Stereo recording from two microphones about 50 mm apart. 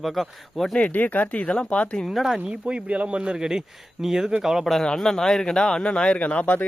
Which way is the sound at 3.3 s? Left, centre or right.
Centre.